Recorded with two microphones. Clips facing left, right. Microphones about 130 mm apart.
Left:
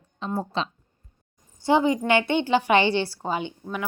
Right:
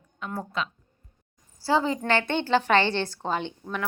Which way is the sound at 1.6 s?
15° left (ahead or behind).